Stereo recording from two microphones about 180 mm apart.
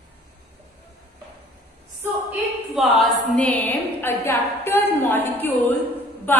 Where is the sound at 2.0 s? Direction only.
5° right (ahead or behind); by 5.5 s 10° left (ahead or behind).